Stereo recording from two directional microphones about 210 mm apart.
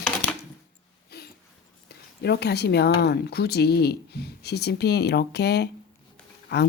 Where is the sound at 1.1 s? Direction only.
50° left (ahead or behind).